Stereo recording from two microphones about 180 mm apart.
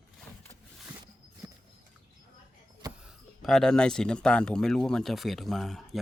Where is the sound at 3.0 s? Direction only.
Centre (ahead or behind).